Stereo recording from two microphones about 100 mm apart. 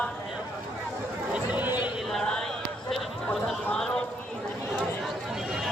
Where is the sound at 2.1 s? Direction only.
5° left (ahead or behind).